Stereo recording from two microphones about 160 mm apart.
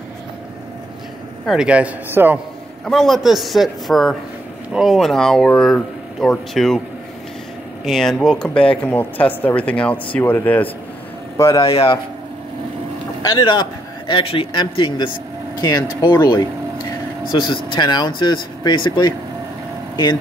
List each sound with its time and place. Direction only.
1.4 s a man's voice: 5° right (ahead or behind)
2.8 s a man's voice: centre (ahead or behind)
7.8 s speech: centre (ahead or behind)
11.3 s speech: 20° left (ahead or behind)
13.2 s a man's voice: 25° left (ahead or behind)